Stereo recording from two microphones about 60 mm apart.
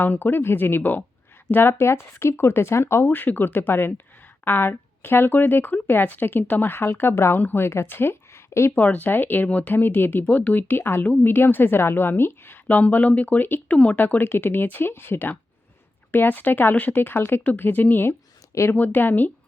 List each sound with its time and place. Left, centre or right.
0.0 s a woman's voice: left
8.7 s speech: left
12.6 s speech: left